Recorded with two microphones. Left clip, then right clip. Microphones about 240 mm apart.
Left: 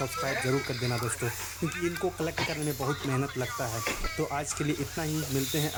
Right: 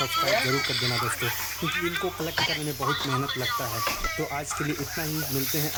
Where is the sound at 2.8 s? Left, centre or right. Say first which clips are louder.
Right 7 dB; right.